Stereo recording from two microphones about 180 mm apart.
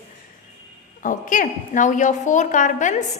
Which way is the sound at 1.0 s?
45° left (ahead or behind).